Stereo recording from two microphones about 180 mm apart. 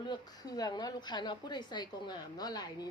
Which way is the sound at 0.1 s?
20° left (ahead or behind).